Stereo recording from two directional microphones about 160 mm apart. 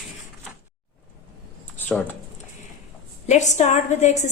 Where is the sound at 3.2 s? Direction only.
50° left (ahead or behind).